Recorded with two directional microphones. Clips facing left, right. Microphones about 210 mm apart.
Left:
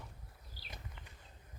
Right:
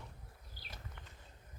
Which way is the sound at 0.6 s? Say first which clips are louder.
Left 1 dB; 50° right (ahead or behind).